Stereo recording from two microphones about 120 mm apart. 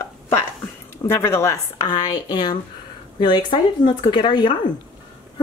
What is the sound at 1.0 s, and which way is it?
Speech, 20° left (ahead or behind).